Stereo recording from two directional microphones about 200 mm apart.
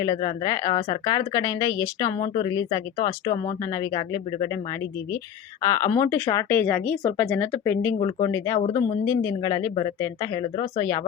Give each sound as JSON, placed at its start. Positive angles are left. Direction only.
{"t": 0.0, "sound": "speech", "side_deg": 20}
{"t": 5.6, "sound": "speech", "side_deg": 15}